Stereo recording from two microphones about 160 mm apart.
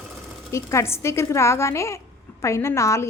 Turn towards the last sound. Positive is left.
turn(degrees=20)  # may be behind; listen again after turning